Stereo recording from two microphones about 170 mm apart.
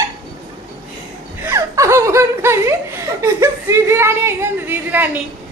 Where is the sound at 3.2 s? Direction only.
15° right (ahead or behind).